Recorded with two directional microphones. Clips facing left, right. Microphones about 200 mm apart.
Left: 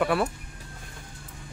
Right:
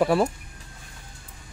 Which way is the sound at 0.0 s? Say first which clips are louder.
Right 4 dB; 30° right (ahead or behind).